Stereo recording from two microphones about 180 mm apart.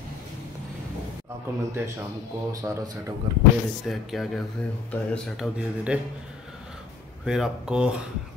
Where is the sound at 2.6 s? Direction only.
20° right (ahead or behind).